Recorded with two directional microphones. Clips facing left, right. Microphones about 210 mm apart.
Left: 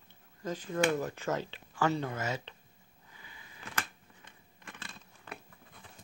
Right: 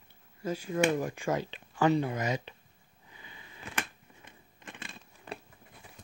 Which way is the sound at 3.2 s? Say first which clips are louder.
Right 3 dB; 20° right (ahead or behind).